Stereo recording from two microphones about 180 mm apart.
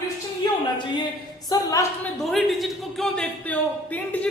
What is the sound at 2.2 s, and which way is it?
A woman's voice, centre (ahead or behind).